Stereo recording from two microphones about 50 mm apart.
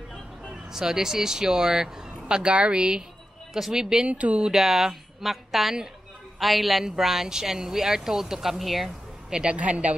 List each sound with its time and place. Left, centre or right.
0.7 s speech: centre
3.5 s speech: centre
4.1 s speech: right
4.5 s a woman's voice: centre
9.3 s speech: centre
9.6 s speech: right